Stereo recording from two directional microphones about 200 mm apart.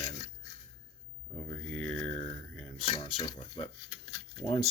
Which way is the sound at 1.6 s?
5° left (ahead or behind).